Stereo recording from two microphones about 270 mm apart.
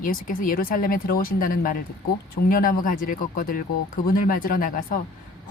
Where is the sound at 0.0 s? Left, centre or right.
Left.